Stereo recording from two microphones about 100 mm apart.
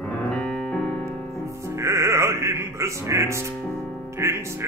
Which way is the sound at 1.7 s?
30° right (ahead or behind).